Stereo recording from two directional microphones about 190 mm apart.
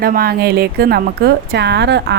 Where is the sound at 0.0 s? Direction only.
50° right (ahead or behind).